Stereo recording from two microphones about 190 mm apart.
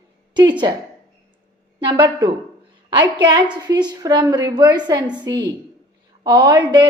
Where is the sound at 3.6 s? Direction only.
20° right (ahead or behind).